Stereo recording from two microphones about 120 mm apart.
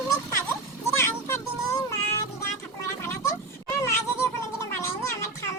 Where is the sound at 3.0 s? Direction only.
25° left (ahead or behind).